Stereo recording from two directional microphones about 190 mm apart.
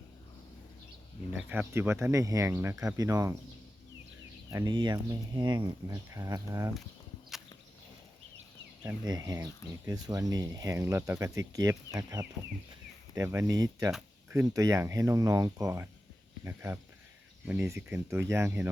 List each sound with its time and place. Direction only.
1.5 s speech: 10° right (ahead or behind)
4.5 s speech: 25° right (ahead or behind)
9.0 s speech: 20° right (ahead or behind)